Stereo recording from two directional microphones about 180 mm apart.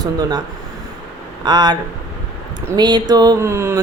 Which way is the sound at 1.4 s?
25° right (ahead or behind).